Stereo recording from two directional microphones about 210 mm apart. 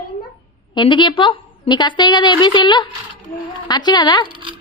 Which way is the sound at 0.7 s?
20° left (ahead or behind).